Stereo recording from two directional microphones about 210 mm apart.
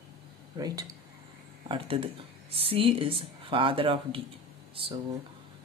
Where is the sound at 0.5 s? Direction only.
15° right (ahead or behind).